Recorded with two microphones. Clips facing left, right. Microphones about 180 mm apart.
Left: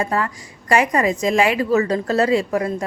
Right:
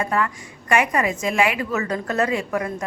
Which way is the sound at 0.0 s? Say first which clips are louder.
Left 1 dB; 30° left (ahead or behind).